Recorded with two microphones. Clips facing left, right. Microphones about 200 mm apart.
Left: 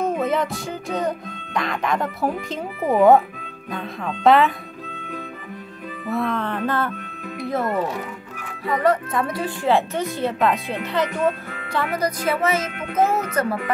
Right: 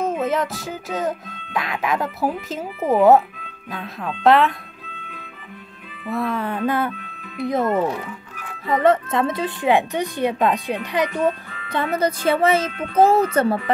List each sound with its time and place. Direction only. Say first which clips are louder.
0.0 s speech: even; centre (ahead or behind)
6.1 s a woman's voice: even; 5° right (ahead or behind); by 13.6 s 30° right (ahead or behind)